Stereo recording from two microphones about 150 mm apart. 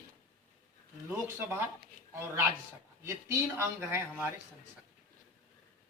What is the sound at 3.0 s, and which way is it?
A man's voice, 20° right (ahead or behind).